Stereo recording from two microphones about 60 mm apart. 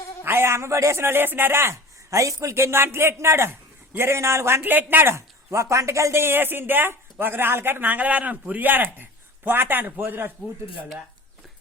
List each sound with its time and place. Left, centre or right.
0.3 s speech: right
2.0 s speech: right
4.6 s a man's voice: right
5.1 s speech: right
6.2 s a man's voice: right